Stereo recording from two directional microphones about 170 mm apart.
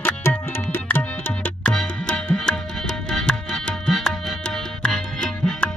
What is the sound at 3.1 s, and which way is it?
Music, 5° left (ahead or behind).